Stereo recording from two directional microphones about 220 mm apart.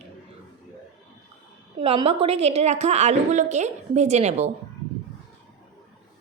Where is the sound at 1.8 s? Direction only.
25° right (ahead or behind).